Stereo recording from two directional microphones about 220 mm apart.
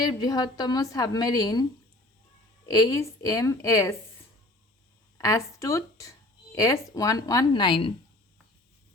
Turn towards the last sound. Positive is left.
turn(degrees=20)  # may be behind; listen again after turning